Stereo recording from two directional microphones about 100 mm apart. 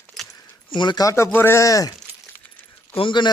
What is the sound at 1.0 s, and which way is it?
Speech, 30° left (ahead or behind).